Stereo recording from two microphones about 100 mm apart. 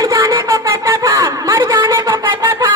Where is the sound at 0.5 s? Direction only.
30° right (ahead or behind).